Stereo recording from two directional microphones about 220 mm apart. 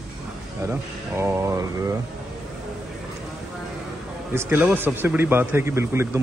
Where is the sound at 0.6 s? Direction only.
10° right (ahead or behind).